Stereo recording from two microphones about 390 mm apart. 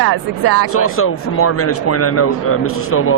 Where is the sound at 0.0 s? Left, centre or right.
Right.